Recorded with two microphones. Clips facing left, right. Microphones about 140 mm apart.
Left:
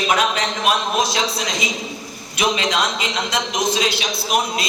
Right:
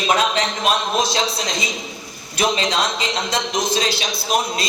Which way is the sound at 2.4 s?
35° right (ahead or behind).